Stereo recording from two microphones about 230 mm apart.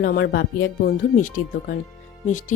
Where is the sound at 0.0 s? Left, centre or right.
Left.